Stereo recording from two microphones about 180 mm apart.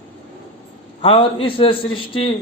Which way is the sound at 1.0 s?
30° left (ahead or behind).